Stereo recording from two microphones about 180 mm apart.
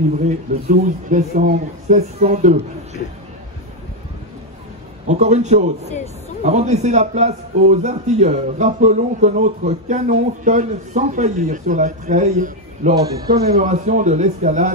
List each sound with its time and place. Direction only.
0.7 s a man's voice: 45° right (ahead or behind)
5.0 s a man's voice: 40° right (ahead or behind)
12.9 s speech: 20° right (ahead or behind)
13.3 s speech: 60° right (ahead or behind)
13.7 s a man's voice: 40° right (ahead or behind)